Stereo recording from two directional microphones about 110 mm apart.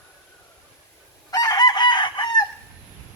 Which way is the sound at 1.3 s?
35° left (ahead or behind).